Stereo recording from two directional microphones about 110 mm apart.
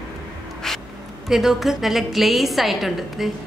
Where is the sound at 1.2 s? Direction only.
5° right (ahead or behind).